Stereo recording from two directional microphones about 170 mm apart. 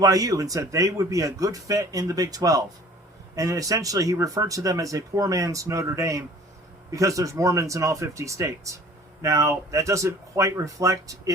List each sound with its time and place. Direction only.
0.0 s speech: 20° right (ahead or behind)